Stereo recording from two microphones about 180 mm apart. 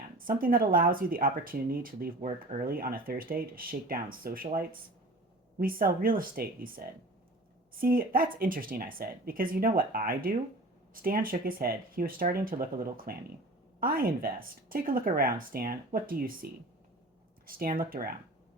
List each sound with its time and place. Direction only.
0.2 s speech: 50° right (ahead or behind)
5.5 s speech: 55° right (ahead or behind)